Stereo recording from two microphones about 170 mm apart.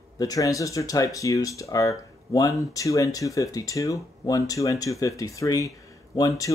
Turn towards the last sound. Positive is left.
turn(degrees=20)  # may be behind; listen again after turning